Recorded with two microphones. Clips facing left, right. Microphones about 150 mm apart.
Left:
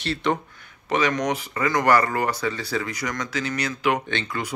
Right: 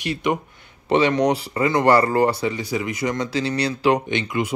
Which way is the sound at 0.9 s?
30° right (ahead or behind).